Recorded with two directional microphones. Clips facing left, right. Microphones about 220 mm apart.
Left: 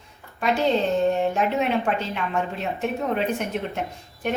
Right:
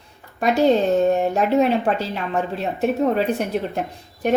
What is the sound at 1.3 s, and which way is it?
A woman's voice, 40° right (ahead or behind).